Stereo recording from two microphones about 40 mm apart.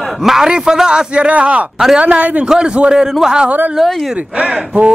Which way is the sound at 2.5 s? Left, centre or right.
Right.